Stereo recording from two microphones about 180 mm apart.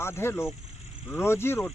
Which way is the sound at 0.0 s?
15° left (ahead or behind).